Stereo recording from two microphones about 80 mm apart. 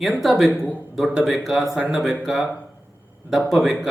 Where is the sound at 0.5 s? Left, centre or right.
Centre.